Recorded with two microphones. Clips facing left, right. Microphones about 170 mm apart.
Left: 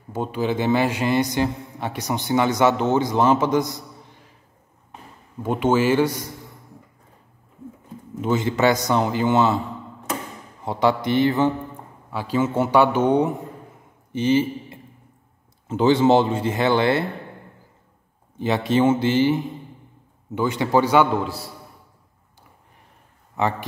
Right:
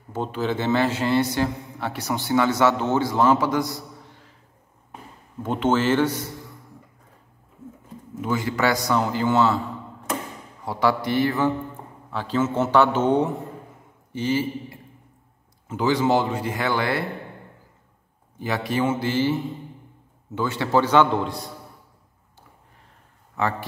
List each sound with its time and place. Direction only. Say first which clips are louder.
0.1 s a man's voice: left 2 dB; 15° left (ahead or behind)
5.4 s a man's voice: left 2 dB; 10° left (ahead or behind)
8.2 s a man's voice: left 4 dB; 25° left (ahead or behind)
18.4 s a man's voice: left 5 dB; 25° left (ahead or behind); by 21.5 s 5° left (ahead or behind)
23.4 s a man's voice: left 2 dB; 20° left (ahead or behind)